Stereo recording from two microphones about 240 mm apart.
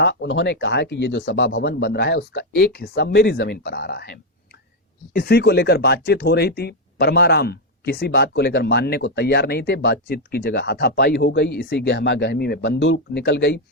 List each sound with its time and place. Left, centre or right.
0.0 s speech: left